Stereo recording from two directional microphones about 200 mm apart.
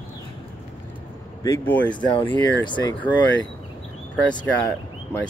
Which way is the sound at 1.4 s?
10° left (ahead or behind).